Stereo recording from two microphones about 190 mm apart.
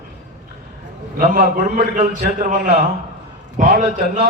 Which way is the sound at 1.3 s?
45° right (ahead or behind).